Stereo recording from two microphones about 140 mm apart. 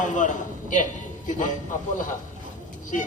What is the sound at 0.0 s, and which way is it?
Speech, 65° left (ahead or behind).